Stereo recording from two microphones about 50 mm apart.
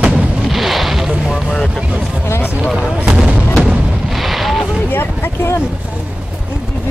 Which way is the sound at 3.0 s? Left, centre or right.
Right.